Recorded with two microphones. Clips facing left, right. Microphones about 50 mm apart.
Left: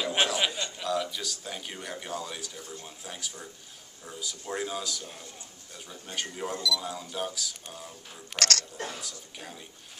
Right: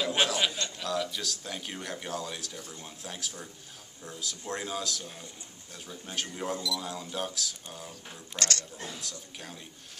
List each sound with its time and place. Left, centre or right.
0.0 s a sound: centre
2.8 s speech: centre
8.3 s speech: left
9.0 s speech: centre